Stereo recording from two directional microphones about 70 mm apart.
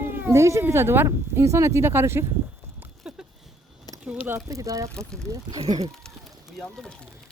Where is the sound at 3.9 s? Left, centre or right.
Left.